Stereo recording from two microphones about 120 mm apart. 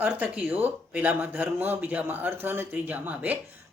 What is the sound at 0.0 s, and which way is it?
Speech, 15° right (ahead or behind).